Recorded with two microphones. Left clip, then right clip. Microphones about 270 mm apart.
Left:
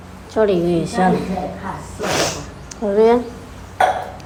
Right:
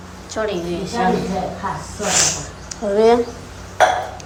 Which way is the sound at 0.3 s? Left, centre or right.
Centre.